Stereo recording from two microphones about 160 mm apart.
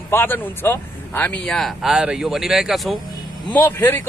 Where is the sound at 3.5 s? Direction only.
10° left (ahead or behind).